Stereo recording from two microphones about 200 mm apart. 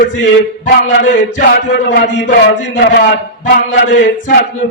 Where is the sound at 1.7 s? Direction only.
60° left (ahead or behind).